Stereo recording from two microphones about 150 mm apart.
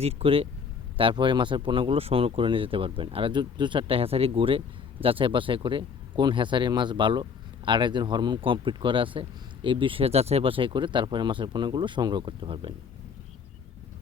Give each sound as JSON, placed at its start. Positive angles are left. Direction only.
{"t": 0.0, "sound": "speech", "side_deg": -40}